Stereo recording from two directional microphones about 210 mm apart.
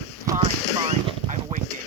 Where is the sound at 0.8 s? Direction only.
25° right (ahead or behind).